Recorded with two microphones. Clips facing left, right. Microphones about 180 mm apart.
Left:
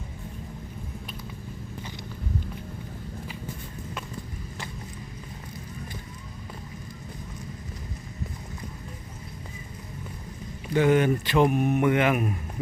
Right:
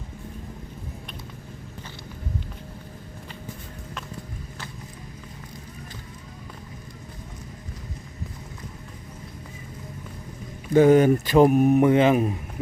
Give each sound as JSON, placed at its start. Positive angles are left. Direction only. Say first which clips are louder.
{"t": 10.8, "sound": "speech", "louder": "right 6 dB", "side_deg": -40}